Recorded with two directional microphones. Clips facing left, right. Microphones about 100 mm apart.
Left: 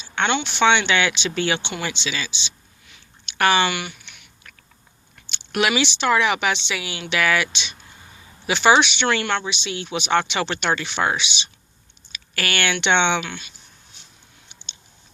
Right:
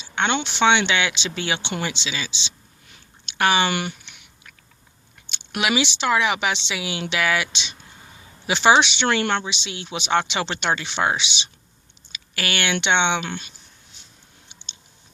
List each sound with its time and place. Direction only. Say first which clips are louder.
0.4 s speech: even; 20° right (ahead or behind)
2.8 s chewing: even; 40° right (ahead or behind)
3.3 s speech: left 1 dB; 20° right (ahead or behind)
3.7 s speech: right 2 dB; 40° right (ahead or behind)
4.0 s chewing: left 1 dB; 20° right (ahead or behind)
5.3 s speech: left 2 dB; 10° right (ahead or behind); by 11.5 s 25° right (ahead or behind)
12.1 s a sound: left 1 dB; 15° right (ahead or behind)
12.8 s speech: left 2 dB; 15° right (ahead or behind)
13.1 s speech: even; 35° right (ahead or behind)